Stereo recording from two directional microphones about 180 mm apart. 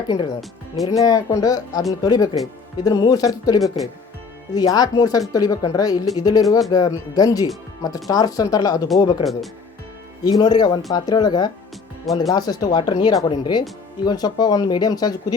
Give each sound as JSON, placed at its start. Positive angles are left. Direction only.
{"t": 0.8, "sound": "speech", "side_deg": 20}
{"t": 10.2, "sound": "speech", "side_deg": 20}